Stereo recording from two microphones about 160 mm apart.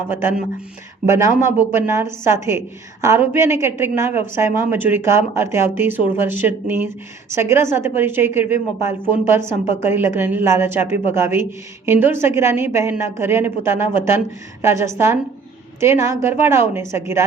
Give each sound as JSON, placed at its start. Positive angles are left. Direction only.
{"t": 0.1, "sound": "a woman's voice", "side_deg": -15}